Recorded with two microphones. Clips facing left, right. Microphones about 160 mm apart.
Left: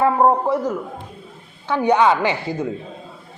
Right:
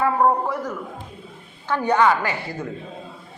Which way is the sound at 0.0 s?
25° left (ahead or behind).